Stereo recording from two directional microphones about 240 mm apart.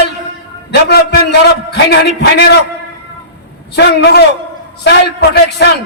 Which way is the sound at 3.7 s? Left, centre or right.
Left.